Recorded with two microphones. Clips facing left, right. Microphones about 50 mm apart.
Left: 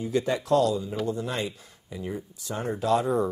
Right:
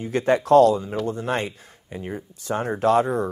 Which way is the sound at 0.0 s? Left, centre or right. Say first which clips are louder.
Right 5 dB; right.